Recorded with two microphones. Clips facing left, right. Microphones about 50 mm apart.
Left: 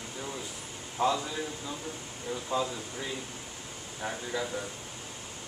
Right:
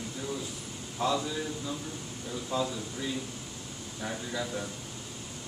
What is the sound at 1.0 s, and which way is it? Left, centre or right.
Speech, left.